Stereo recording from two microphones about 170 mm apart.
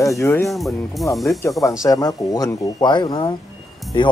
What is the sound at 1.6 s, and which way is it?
Speech, 20° left (ahead or behind).